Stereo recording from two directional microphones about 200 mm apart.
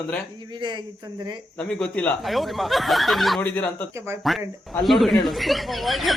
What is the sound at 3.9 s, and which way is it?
Speech, 15° right (ahead or behind).